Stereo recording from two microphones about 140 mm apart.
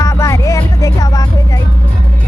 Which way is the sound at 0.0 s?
25° left (ahead or behind).